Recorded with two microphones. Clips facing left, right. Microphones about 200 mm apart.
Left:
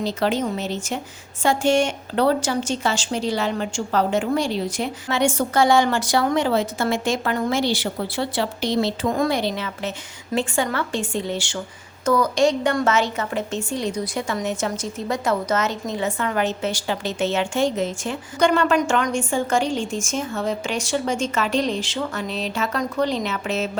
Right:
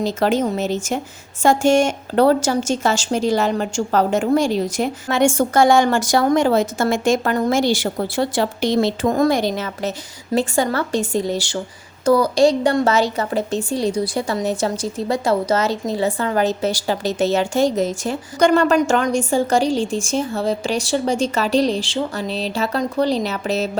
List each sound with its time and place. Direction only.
0.0 s a woman's voice: 45° right (ahead or behind)